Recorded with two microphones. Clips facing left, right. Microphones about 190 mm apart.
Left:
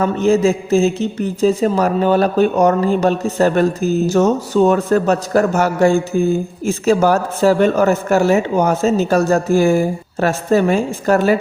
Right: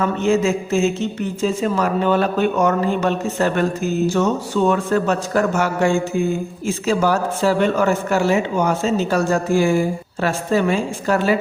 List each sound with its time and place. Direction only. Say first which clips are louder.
0.0 s a woman's voice: left 4 dB; 35° left (ahead or behind)